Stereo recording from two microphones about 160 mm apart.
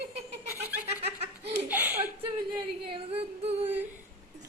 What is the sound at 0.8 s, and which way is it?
Laughter, 40° right (ahead or behind).